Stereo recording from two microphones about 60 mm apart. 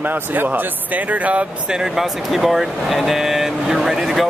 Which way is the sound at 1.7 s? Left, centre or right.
Centre.